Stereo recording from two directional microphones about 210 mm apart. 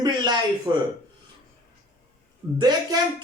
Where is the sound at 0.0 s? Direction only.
20° right (ahead or behind).